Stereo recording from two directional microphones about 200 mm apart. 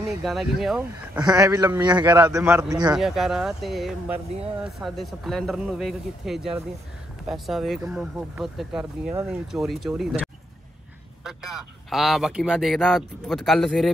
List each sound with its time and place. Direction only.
0.2 s a man's voice: centre (ahead or behind)
1.2 s a man's voice: 15° right (ahead or behind)
3.0 s a man's voice: centre (ahead or behind)